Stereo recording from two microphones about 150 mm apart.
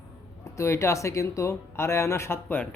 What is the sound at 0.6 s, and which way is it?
Speech, 20° left (ahead or behind).